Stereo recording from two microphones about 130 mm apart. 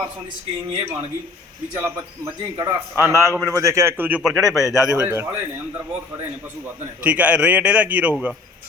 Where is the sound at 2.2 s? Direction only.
20° right (ahead or behind).